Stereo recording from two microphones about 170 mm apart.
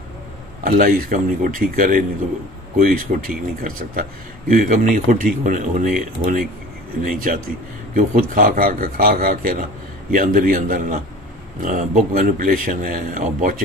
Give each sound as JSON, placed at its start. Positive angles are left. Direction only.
{"t": 0.7, "sound": "a man's voice", "side_deg": -55}